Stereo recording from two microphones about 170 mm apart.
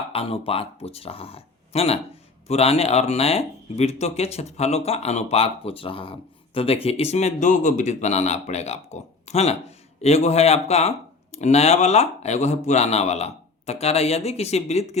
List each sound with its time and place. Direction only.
0.1 s speech: 35° left (ahead or behind)